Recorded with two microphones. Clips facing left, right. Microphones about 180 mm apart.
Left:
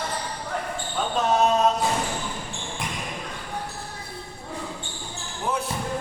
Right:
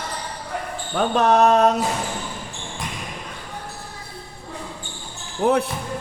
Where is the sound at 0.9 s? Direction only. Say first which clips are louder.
Right 6 dB; 65° right (ahead or behind).